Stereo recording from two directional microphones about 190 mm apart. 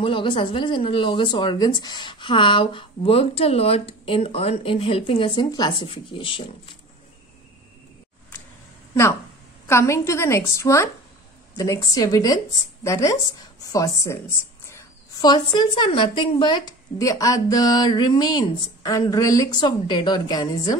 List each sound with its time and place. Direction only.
0.0 s speech: 25° left (ahead or behind)
9.7 s a woman's voice: 15° left (ahead or behind)
15.2 s speech: 20° left (ahead or behind)